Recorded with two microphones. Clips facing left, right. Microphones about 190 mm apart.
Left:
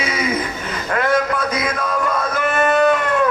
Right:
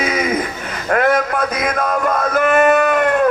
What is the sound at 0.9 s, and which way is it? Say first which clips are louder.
Speech: right 5 dB; 50° right (ahead or behind).